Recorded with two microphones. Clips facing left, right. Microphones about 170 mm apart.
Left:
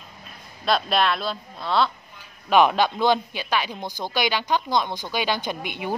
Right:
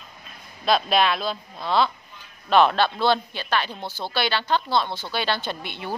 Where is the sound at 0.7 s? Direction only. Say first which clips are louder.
Right 1 dB; centre (ahead or behind).